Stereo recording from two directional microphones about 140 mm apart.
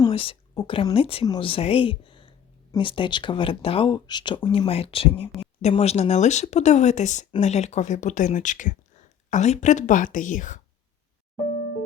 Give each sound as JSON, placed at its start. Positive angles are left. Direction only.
{"t": 0.1, "sound": "a woman's voice", "side_deg": 40}